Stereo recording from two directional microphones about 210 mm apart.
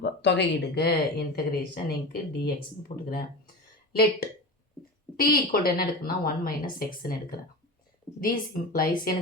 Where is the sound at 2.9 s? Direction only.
25° left (ahead or behind).